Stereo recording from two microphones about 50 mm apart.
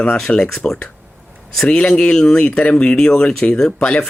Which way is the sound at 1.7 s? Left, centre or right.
Centre.